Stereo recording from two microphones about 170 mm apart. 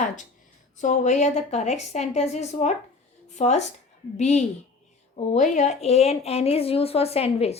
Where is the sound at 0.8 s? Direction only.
45° left (ahead or behind).